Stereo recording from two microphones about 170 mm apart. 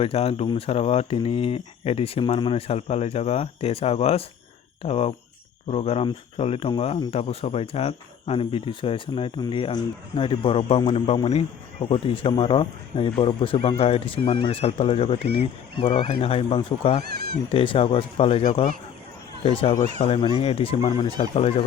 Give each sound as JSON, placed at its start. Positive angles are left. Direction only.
{"t": 0.0, "sound": "speech", "side_deg": 35}
{"t": 15.9, "sound": "speech", "side_deg": 45}
{"t": 16.2, "sound": "speech", "side_deg": 35}
{"t": 17.0, "sound": "speech", "side_deg": -70}
{"t": 17.5, "sound": "speech", "side_deg": 30}